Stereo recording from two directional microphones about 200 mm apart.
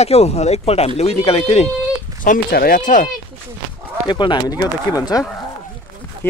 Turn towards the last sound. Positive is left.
turn(degrees=10)  # may be behind; listen again after turning